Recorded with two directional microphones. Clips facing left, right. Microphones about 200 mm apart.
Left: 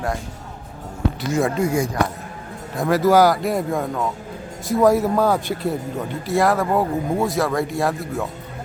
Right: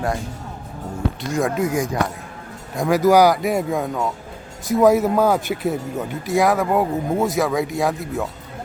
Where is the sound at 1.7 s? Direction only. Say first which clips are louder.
Even; 15° right (ahead or behind).